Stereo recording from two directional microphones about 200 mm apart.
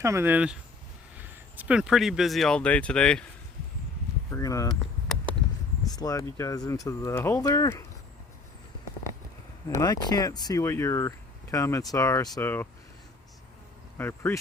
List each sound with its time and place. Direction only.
0.0 s speech: 15° right (ahead or behind); by 3.2 s 5° left (ahead or behind)
4.3 s speech: 15° left (ahead or behind)
6.0 s speech: 15° left (ahead or behind)
9.6 s speech: 15° left (ahead or behind)
14.0 s speech: 10° left (ahead or behind)